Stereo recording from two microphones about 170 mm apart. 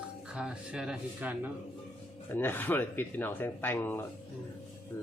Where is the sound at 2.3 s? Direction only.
10° left (ahead or behind).